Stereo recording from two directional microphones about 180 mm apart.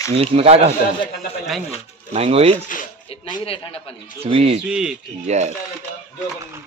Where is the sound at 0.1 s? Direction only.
30° right (ahead or behind).